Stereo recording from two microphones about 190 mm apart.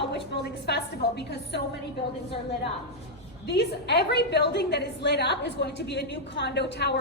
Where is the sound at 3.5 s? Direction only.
60° left (ahead or behind).